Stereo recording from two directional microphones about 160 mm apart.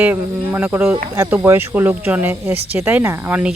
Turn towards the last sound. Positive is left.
turn(degrees=-10)  # may be behind; listen again after turning